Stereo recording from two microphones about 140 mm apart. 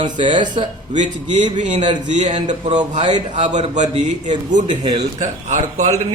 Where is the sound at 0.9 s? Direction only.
60° right (ahead or behind).